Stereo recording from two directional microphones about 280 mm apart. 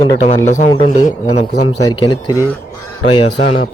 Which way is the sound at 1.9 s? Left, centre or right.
Centre.